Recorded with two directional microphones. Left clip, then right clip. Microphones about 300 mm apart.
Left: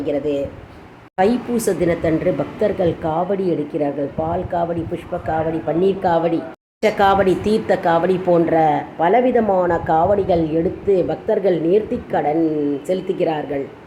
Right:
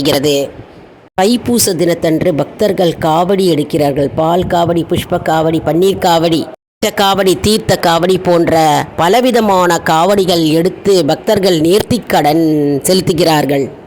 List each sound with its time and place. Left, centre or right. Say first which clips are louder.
0.0 s speech: right 9 dB; right